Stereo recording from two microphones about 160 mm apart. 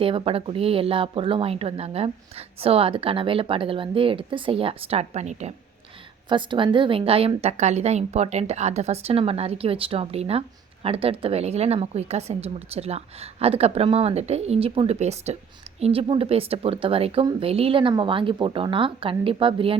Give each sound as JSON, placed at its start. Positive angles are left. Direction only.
{"t": 0.0, "sound": "a woman's voice", "side_deg": -35}
{"t": 6.2, "sound": "a woman's voice", "side_deg": -30}